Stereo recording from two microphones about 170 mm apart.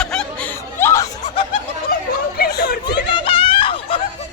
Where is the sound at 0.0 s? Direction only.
5° left (ahead or behind).